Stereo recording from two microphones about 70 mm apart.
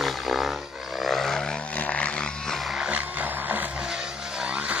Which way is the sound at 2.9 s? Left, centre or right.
Right.